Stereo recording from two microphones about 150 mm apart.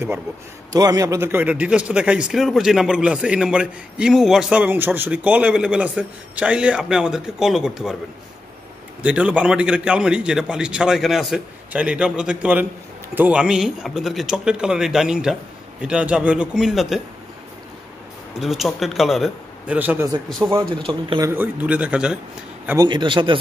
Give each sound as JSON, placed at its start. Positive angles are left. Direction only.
{"t": 0.7, "sound": "speech", "side_deg": -25}
{"t": 9.0, "sound": "speech", "side_deg": -10}
{"t": 18.4, "sound": "speech", "side_deg": 0}
{"t": 19.8, "sound": "speech", "side_deg": -10}
{"t": 20.7, "sound": "a man's voice", "side_deg": -35}
{"t": 21.3, "sound": "speech", "side_deg": -10}
{"t": 22.8, "sound": "a man's voice", "side_deg": -30}